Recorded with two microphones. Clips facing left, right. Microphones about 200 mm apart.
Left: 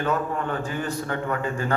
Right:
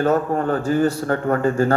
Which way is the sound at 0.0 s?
40° right (ahead or behind).